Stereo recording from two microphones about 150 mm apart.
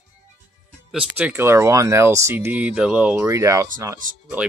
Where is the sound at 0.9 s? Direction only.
15° right (ahead or behind).